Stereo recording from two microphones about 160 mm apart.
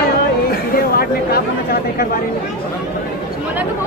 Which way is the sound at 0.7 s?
70° left (ahead or behind).